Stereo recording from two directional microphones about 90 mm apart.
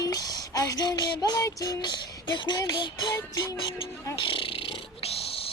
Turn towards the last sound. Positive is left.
turn(degrees=70)  # may be behind; listen again after turning